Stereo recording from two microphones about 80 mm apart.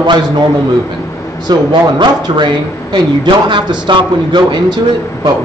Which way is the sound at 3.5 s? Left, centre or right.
Right.